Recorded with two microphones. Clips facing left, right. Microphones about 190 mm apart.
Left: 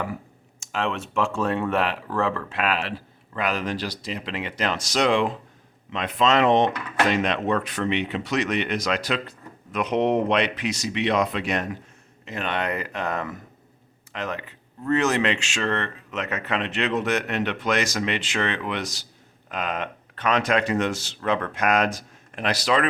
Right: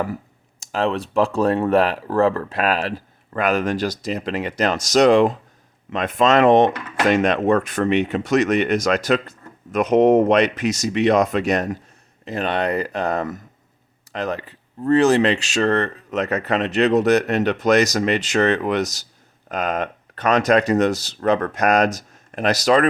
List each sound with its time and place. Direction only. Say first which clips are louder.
0.6 s speech: right 6 dB; 35° right (ahead or behind)